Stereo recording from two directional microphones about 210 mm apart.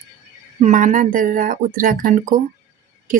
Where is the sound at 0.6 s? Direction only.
40° right (ahead or behind).